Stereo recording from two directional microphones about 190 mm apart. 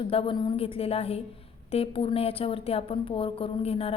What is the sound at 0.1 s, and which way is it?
A woman's voice, 30° left (ahead or behind).